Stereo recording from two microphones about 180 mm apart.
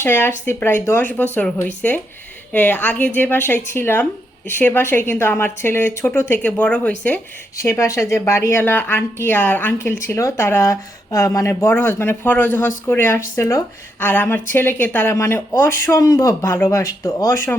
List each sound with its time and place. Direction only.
0.0 s a woman's voice: 10° left (ahead or behind)